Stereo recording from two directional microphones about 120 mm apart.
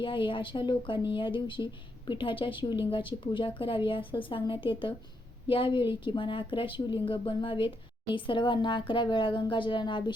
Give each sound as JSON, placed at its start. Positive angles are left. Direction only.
{"t": 0.0, "sound": "speech", "side_deg": 45}